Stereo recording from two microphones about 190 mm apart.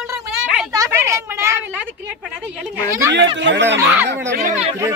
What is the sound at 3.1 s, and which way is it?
A child's voice, 70° right (ahead or behind).